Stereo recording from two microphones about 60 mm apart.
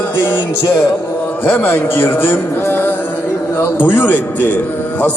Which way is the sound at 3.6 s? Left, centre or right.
Left.